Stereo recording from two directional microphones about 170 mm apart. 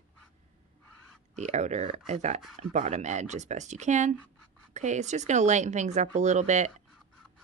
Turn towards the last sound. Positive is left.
turn(degrees=-45)  # may be behind; listen again after turning